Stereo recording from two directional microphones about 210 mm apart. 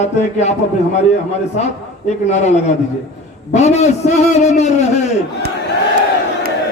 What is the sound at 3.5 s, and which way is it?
A man's voice, 30° left (ahead or behind).